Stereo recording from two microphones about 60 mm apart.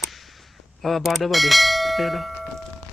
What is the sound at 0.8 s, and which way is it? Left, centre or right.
Speech, centre.